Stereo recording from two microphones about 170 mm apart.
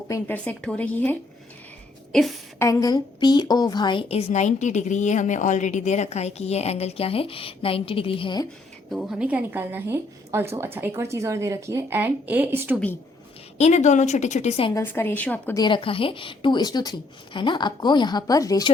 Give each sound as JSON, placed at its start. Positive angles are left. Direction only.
{"t": 0.1, "sound": "speech", "side_deg": 10}
{"t": 2.1, "sound": "a woman's voice", "side_deg": 0}
{"t": 2.6, "sound": "a woman's voice", "side_deg": 20}
{"t": 8.9, "sound": "a woman's voice", "side_deg": -5}
{"t": 13.6, "sound": "a woman's voice", "side_deg": 40}
{"t": 14.7, "sound": "speech", "side_deg": 15}
{"t": 15.5, "sound": "speech", "side_deg": 25}